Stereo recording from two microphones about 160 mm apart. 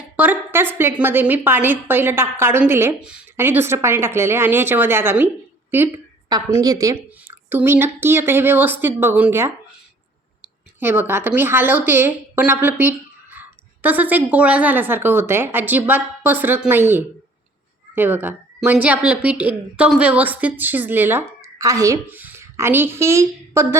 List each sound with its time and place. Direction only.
0.2 s a woman's voice: 10° right (ahead or behind)
7.3 s a sound: 15° right (ahead or behind)
8.0 s a woman's voice: 15° right (ahead or behind)
10.8 s a woman's voice: 15° right (ahead or behind)